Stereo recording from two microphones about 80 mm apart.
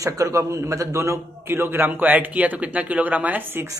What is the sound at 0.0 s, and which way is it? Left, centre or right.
A man's voice, right.